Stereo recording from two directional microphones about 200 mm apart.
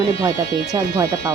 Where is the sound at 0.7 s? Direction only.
15° right (ahead or behind).